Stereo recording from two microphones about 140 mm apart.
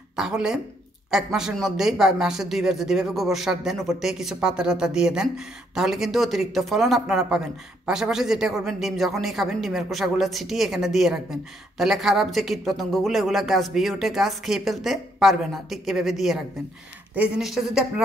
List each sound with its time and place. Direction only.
0.1 s speech: 5° right (ahead or behind)